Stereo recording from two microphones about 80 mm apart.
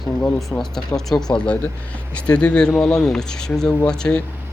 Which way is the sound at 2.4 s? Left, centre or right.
Centre.